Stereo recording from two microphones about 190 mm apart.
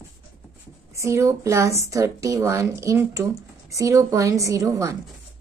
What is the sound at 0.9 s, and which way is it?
A woman's voice, 15° right (ahead or behind).